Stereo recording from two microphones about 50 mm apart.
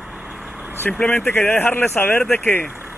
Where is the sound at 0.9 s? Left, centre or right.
Centre.